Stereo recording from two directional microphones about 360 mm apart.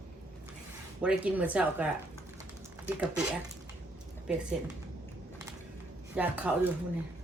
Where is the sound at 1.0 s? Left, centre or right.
Centre.